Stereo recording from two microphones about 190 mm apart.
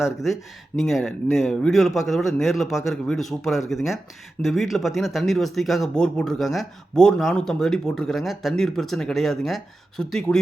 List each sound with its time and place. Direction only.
0.0 s speech: centre (ahead or behind)